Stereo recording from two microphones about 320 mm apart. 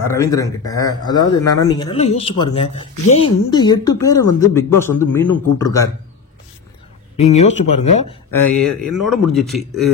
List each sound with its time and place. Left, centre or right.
0.1 s speech: centre
7.2 s speech: left
8.3 s speech: centre